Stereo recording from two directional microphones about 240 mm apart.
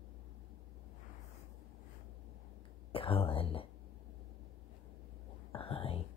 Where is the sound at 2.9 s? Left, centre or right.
Left.